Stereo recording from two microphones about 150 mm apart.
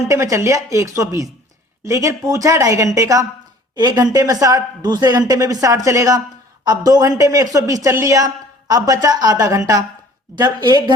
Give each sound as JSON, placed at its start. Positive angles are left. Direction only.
{"t": 0.1, "sound": "a woman's voice", "side_deg": -20}